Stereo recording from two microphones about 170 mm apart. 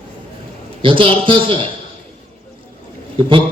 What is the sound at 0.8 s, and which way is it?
Speech, 30° right (ahead or behind).